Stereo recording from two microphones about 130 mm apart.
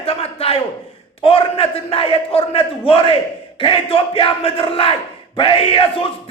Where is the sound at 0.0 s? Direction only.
50° left (ahead or behind).